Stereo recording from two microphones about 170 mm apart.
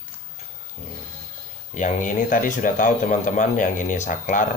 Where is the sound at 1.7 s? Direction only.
50° left (ahead or behind).